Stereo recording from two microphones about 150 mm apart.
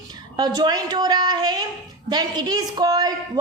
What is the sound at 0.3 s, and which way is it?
A woman's voice, 25° right (ahead or behind).